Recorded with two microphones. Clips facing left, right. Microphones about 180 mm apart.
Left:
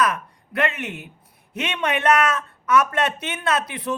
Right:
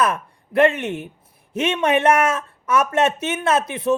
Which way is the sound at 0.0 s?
30° right (ahead or behind).